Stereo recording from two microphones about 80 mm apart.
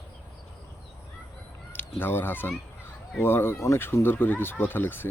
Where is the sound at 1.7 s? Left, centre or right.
Left.